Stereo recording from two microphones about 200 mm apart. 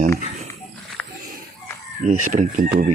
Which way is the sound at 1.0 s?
5° left (ahead or behind).